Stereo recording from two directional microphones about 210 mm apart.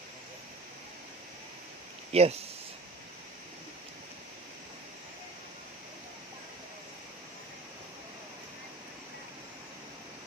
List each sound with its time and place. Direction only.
2.1 s speech: 30° right (ahead or behind)